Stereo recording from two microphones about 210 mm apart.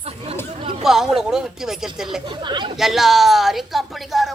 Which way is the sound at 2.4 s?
20° right (ahead or behind).